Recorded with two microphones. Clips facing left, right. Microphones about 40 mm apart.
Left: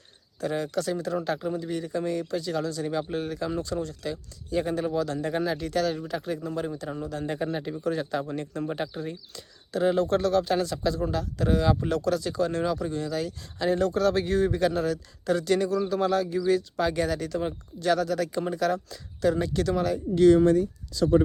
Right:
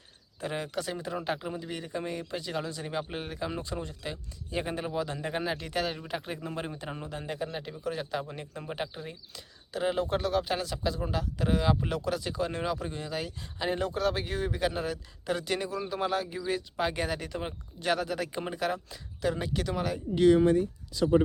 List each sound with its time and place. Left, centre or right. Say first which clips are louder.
0.3 s speech: left 5 dB; right
7.3 s a man's voice: left 5 dB; centre